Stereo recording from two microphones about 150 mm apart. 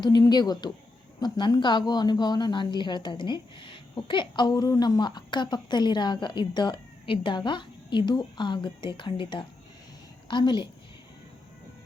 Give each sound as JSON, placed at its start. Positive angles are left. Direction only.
{"t": 0.0, "sound": "a woman's voice", "side_deg": 25}
{"t": 10.2, "sound": "a woman's voice", "side_deg": 30}